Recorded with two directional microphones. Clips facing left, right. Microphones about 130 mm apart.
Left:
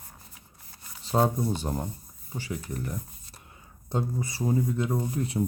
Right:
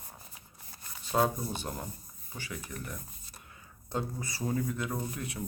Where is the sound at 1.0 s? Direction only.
30° left (ahead or behind).